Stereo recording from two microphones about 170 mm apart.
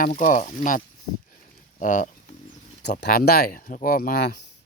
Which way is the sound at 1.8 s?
50° left (ahead or behind).